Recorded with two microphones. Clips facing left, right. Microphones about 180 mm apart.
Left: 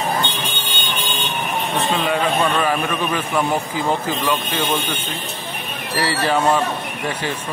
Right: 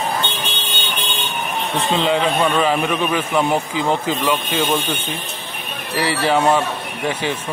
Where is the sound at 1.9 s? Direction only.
20° right (ahead or behind).